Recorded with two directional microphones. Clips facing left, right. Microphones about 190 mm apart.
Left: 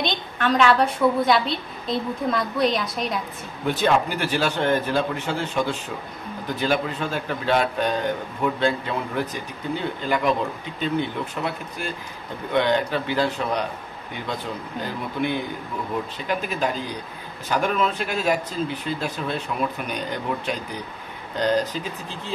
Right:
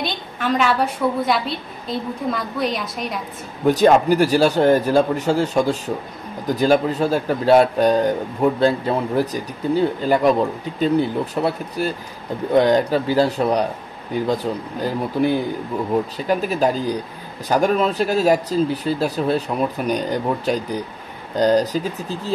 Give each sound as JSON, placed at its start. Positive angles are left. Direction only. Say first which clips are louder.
{"t": 0.0, "sound": "a woman's voice", "louder": "even", "side_deg": -5}
{"t": 3.6, "sound": "speech", "louder": "right 7 dB", "side_deg": -40}